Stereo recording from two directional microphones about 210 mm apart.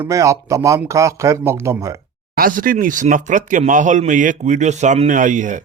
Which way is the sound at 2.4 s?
40° right (ahead or behind).